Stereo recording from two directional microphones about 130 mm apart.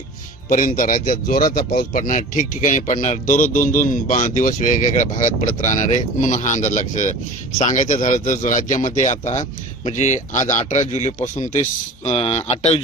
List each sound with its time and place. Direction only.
0.4 s speech: 90° left; by 7.9 s 70° left (ahead or behind)
8.0 s speech: 90° left; by 11.6 s 65° left (ahead or behind)
12.0 s a man's voice: 55° left (ahead or behind)